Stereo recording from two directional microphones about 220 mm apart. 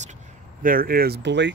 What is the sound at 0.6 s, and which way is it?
Speech, 40° right (ahead or behind).